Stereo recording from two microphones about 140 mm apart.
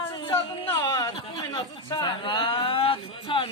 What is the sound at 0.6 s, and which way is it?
Speech, 20° left (ahead or behind).